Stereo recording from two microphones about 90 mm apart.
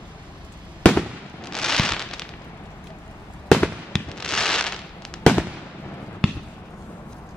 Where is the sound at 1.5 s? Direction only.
5° left (ahead or behind).